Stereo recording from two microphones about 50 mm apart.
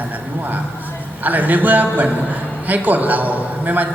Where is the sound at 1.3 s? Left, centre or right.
Right.